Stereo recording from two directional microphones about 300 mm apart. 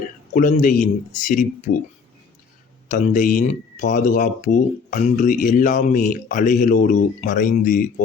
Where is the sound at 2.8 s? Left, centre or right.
Left.